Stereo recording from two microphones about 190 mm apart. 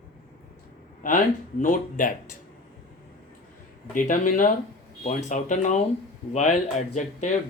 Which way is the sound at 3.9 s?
45° left (ahead or behind).